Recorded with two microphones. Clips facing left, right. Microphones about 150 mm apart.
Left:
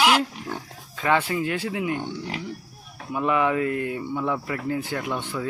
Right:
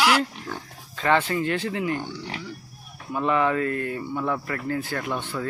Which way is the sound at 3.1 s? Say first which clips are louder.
Even; 10° left (ahead or behind).